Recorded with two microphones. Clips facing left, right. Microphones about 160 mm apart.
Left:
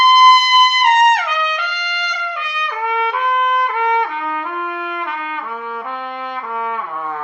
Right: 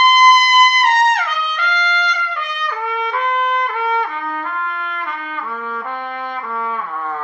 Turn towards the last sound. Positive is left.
turn(degrees=10)  # may be behind; listen again after turning